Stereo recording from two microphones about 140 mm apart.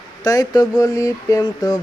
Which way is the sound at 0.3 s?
25° left (ahead or behind).